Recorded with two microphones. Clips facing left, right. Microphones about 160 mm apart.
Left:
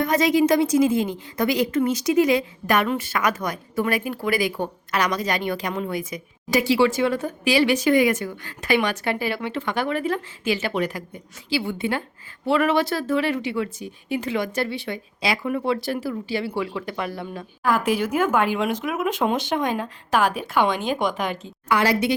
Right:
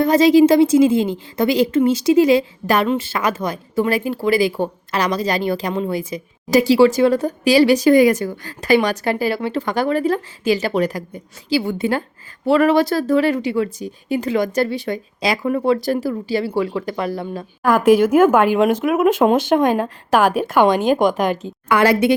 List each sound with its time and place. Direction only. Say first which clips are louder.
0.0 s a woman's voice: right 7 dB; 30° right (ahead or behind); by 22.1 s 55° right (ahead or behind)